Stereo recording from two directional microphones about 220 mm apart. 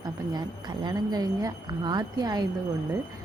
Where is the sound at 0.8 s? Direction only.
15° right (ahead or behind).